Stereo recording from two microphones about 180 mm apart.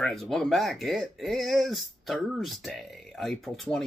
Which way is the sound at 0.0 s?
Centre (ahead or behind).